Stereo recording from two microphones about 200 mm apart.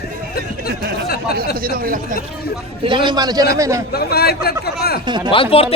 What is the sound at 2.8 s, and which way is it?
A man's voice, 25° right (ahead or behind).